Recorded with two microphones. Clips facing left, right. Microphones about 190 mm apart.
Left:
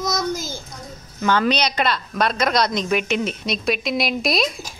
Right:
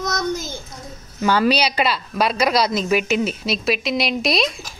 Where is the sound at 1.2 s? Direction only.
10° right (ahead or behind).